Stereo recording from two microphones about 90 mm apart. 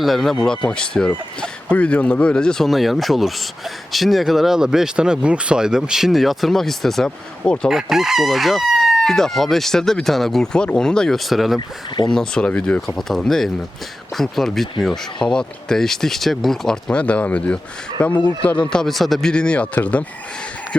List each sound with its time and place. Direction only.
0.0 s crowing: centre (ahead or behind)
0.4 s speech: 10° left (ahead or behind)
3.9 s crowing: centre (ahead or behind)
7.7 s crowing: 5° right (ahead or behind)
12.1 s speech: 10° left (ahead or behind)
12.5 s crowing: 15° left (ahead or behind)
15.3 s speech: 5° left (ahead or behind)